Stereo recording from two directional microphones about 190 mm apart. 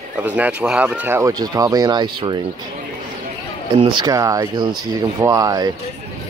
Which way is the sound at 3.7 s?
25° right (ahead or behind).